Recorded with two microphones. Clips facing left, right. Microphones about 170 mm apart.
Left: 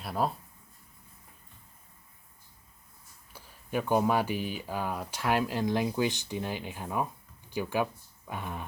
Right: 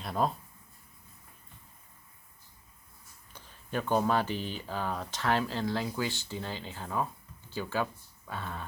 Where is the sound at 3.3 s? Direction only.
10° left (ahead or behind).